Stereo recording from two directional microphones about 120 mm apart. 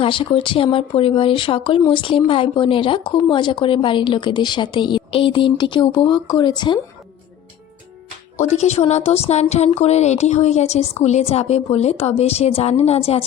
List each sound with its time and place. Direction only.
0.0 s speech: 50° left (ahead or behind)
8.4 s speech: 70° left (ahead or behind)